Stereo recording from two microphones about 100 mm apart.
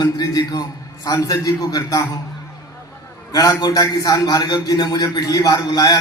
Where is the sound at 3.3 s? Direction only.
35° left (ahead or behind).